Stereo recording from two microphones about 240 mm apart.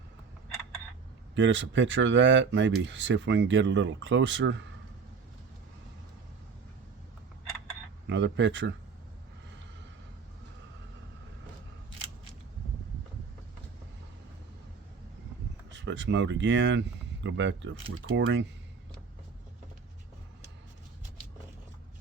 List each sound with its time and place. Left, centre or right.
1.4 s speech: right
8.0 s speech: right
15.7 s speech: right